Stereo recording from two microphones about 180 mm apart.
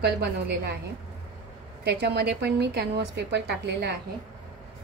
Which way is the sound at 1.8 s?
70° right (ahead or behind).